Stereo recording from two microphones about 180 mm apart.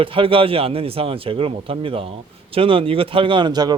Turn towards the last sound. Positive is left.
turn(degrees=-25)  # may be behind; listen again after turning